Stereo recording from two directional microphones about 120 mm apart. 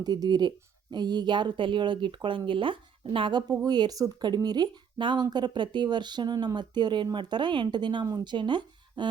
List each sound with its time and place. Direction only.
0.0 s speech: 35° right (ahead or behind)
3.5 s speech: 35° right (ahead or behind)